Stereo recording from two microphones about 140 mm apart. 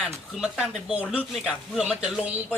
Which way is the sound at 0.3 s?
5° right (ahead or behind).